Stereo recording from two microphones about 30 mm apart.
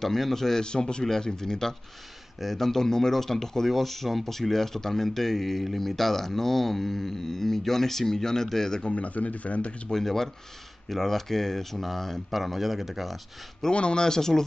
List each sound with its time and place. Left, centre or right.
0.0 s speech: centre
0.6 s a man's voice: left
1.2 s speech: centre
8.9 s speech: left
9.9 s speech: centre
13.7 s speech: left
14.0 s speech: centre